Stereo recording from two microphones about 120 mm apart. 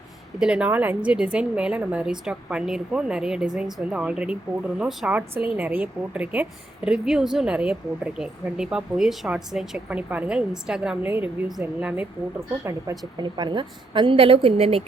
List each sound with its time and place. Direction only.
0.3 s a woman's voice: 5° right (ahead or behind)
13.2 s a woman's voice: 35° right (ahead or behind); by 14.8 s 55° right (ahead or behind)